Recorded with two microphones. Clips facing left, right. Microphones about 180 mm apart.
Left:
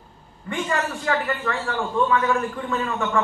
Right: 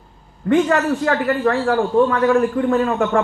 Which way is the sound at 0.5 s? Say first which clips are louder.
Right 10 dB; 65° right (ahead or behind).